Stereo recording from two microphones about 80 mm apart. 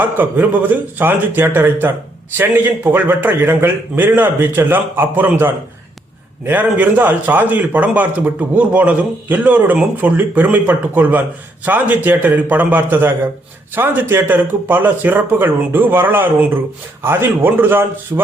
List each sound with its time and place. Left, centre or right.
0.0 s a man's voice: right